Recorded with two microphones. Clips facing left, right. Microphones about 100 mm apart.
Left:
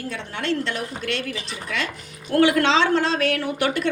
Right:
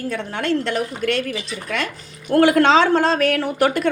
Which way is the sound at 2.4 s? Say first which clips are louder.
Right 4 dB; 45° right (ahead or behind).